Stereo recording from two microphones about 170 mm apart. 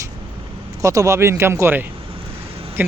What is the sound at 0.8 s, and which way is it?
A man's voice, 20° right (ahead or behind).